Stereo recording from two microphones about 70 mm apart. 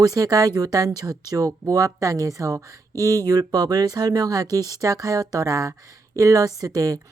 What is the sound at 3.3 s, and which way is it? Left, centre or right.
Speech, right.